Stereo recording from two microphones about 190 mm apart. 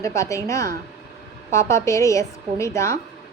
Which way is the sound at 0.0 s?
15° left (ahead or behind).